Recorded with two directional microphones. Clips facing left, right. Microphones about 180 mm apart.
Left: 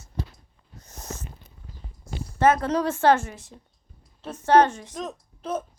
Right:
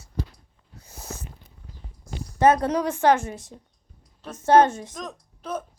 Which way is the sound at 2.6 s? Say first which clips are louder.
Even; 15° right (ahead or behind).